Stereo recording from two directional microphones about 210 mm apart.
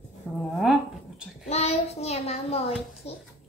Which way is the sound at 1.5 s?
30° left (ahead or behind).